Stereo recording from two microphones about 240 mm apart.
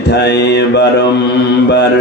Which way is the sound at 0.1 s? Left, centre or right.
Left.